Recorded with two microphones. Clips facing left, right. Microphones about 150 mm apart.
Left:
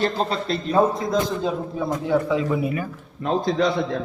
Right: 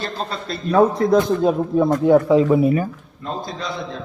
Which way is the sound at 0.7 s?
60° right (ahead or behind).